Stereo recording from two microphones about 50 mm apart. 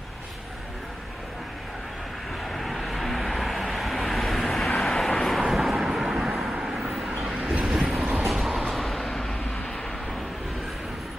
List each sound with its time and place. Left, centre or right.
2.5 s vehicle: centre
7.6 s vehicle: centre